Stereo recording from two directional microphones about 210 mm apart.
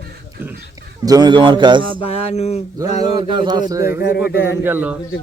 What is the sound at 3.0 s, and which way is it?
Speech, 25° right (ahead or behind).